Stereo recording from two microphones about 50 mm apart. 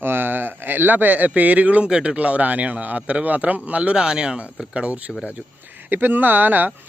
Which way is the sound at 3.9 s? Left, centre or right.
Centre.